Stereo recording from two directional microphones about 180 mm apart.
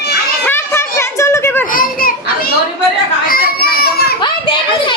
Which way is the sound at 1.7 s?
50° left (ahead or behind).